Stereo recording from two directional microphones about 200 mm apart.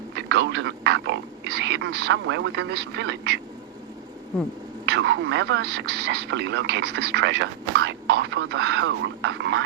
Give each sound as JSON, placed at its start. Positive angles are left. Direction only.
{"t": 0.2, "sound": "speech", "side_deg": -60}
{"t": 4.9, "sound": "speech", "side_deg": -65}